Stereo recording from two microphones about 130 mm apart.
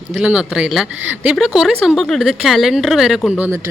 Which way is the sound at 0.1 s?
5° right (ahead or behind).